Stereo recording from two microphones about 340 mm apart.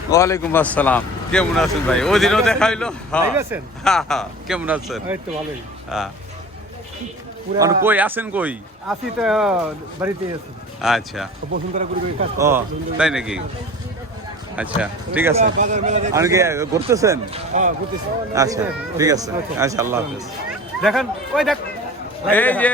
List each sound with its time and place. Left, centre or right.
0.1 s speech: centre
7.9 s speech: centre
11.5 s speech: right
12.4 s speech: centre
14.5 s speech: centre
15.4 s speech: right
16.1 s speech: centre
17.5 s speech: right
18.3 s speech: centre